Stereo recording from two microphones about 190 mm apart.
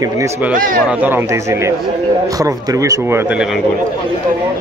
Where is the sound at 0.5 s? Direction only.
45° right (ahead or behind).